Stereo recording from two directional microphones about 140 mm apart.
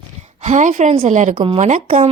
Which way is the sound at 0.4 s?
60° right (ahead or behind).